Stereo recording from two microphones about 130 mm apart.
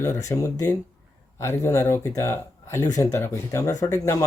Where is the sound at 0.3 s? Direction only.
25° left (ahead or behind).